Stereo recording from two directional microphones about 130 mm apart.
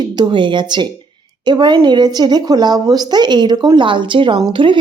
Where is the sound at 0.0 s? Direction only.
35° right (ahead or behind).